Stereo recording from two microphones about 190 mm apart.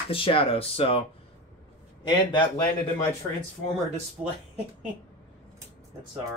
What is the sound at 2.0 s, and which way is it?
Speech, 25° left (ahead or behind).